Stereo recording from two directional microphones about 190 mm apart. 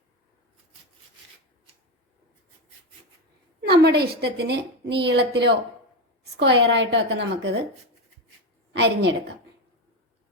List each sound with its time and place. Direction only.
3.8 s a woman's voice: 60° right (ahead or behind)
8.7 s a woman's voice: 65° right (ahead or behind)